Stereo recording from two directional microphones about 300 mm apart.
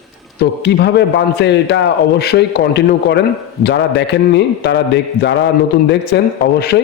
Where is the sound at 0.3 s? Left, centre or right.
Left.